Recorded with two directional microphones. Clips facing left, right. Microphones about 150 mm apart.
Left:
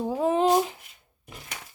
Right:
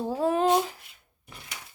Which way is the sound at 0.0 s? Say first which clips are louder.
Left 1 dB; 15° left (ahead or behind).